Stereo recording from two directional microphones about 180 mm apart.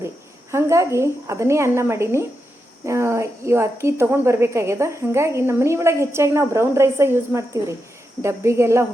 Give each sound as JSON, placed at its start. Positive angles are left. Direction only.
{"t": 0.5, "sound": "a woman's voice", "side_deg": -15}